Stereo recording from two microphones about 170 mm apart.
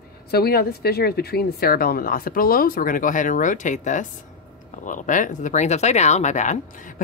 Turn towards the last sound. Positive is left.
turn(degrees=50)  # may be behind; listen again after turning